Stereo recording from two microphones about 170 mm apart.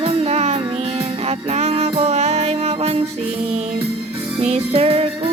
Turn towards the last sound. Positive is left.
turn(degrees=-35)  # may be behind; listen again after turning